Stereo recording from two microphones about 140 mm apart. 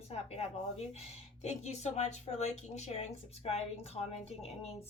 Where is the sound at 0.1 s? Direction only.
50° left (ahead or behind).